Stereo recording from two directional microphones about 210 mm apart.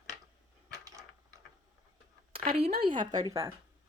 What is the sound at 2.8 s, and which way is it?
Speech, 25° right (ahead or behind).